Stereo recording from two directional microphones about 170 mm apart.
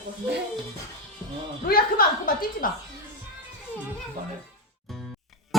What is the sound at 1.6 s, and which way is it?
A woman's voice, 60° left (ahead or behind).